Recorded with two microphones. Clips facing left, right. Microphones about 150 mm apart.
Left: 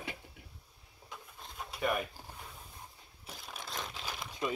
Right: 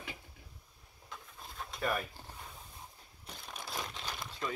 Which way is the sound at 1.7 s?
Centre (ahead or behind).